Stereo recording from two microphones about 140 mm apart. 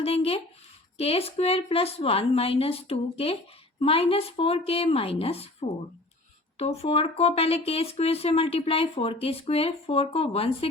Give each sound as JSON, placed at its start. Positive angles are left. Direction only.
{"t": 0.0, "sound": "speech", "side_deg": 45}